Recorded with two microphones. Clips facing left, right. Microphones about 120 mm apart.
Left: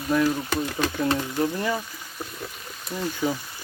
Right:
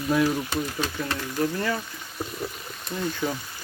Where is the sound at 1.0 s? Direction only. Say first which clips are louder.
Left 3 dB; 20° left (ahead or behind).